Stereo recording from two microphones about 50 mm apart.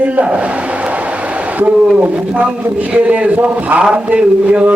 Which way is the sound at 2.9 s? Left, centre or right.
Right.